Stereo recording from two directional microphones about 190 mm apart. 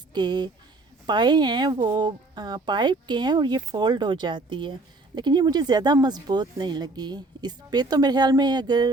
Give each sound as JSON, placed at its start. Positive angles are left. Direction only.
{"t": 0.1, "sound": "speech", "side_deg": -25}